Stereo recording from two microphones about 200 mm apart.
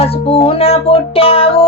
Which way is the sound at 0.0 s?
30° left (ahead or behind).